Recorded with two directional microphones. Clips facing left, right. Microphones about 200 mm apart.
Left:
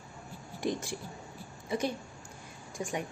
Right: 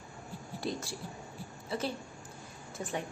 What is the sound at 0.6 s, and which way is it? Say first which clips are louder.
Speech: left 4 dB; 15° left (ahead or behind).